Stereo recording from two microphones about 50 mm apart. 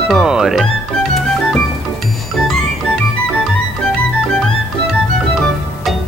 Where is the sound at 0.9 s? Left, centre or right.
Centre.